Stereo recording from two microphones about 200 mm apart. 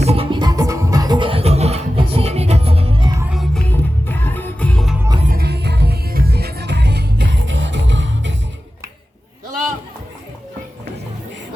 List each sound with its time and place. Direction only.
0.0 s music: 30° right (ahead or behind)
3.2 s music: centre (ahead or behind)
5.3 s music: 55° right (ahead or behind)